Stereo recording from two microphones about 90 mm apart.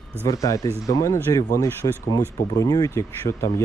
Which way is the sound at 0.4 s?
40° left (ahead or behind).